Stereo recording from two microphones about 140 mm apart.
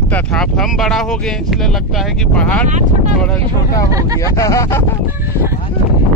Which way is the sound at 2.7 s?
55° right (ahead or behind).